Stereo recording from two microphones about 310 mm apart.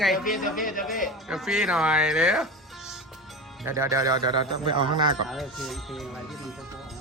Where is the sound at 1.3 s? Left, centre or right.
Centre.